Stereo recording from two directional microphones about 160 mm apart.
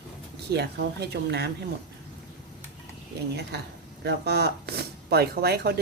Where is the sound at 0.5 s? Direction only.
90° right.